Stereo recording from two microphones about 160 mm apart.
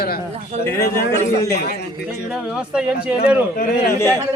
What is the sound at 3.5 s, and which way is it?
Speech, 65° left (ahead or behind).